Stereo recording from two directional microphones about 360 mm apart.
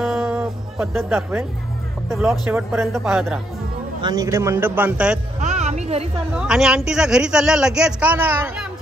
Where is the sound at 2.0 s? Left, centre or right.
Centre.